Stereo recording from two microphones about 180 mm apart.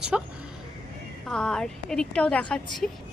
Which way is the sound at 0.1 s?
5° right (ahead or behind).